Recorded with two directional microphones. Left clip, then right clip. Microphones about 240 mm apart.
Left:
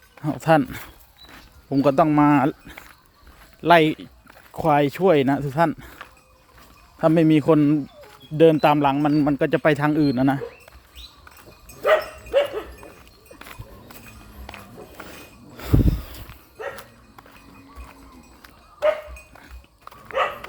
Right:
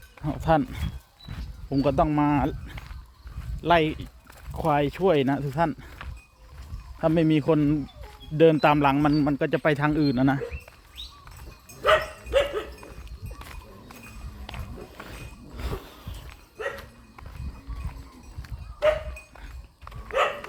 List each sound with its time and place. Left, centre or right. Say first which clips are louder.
0.2 s a man's voice: left 5 dB; centre
11.8 s dog: left 2 dB; right
13.4 s music: left 4 dB; centre
14.4 s a sound: left 2 dB; centre
19.8 s dog: left 2 dB; centre